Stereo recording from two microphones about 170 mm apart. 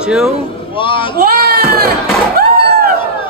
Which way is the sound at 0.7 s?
30° left (ahead or behind).